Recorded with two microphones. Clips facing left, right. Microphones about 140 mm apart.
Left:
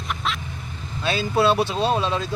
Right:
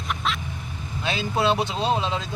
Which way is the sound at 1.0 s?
20° right (ahead or behind).